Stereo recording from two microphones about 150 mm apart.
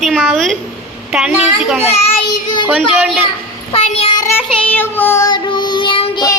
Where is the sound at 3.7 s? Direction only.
45° left (ahead or behind).